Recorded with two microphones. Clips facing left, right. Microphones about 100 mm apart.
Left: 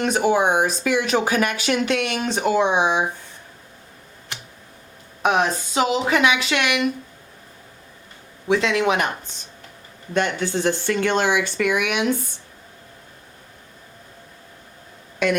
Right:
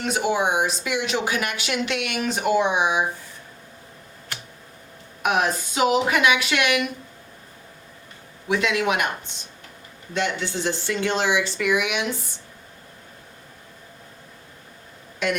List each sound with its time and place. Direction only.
0.0 s speech: 45° left (ahead or behind)
5.2 s speech: 30° left (ahead or behind)
8.4 s speech: 30° left (ahead or behind)
10.2 s speech: 50° left (ahead or behind)